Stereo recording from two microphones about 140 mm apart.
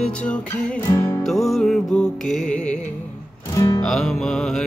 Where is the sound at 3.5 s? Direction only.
25° left (ahead or behind).